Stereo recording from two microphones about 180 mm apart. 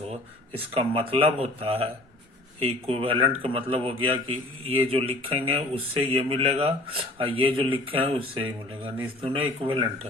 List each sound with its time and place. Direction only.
0.1 s speech: 30° right (ahead or behind)